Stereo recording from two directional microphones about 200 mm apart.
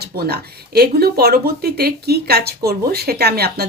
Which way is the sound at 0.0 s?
50° right (ahead or behind).